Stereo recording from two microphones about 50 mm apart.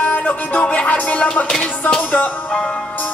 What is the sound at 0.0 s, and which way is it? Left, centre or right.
Music, left.